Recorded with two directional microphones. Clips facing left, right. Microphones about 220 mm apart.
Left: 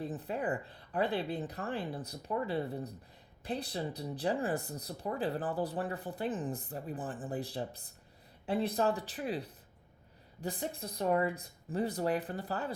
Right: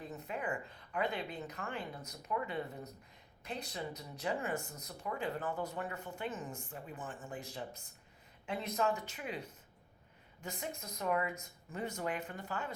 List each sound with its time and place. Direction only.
0.0 s speech: 35° left (ahead or behind)